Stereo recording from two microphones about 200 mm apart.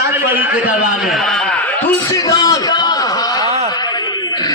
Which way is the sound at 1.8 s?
20° left (ahead or behind).